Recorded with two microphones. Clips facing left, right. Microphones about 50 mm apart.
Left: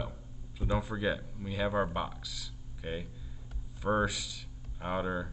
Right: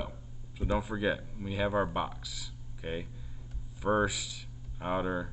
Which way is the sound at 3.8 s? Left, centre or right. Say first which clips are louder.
Right 1 dB; centre.